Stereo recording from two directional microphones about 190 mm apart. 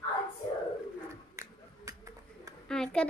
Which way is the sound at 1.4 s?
15° right (ahead or behind).